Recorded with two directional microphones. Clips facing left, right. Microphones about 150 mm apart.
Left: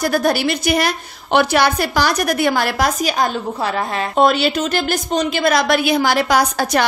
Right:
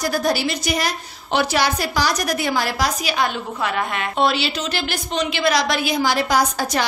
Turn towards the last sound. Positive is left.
turn(degrees=70)  # may be behind; listen again after turning